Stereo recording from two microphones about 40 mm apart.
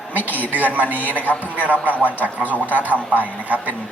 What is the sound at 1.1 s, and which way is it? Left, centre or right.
Speech, left.